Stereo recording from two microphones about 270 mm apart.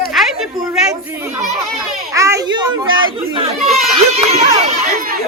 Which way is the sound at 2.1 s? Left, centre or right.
Centre.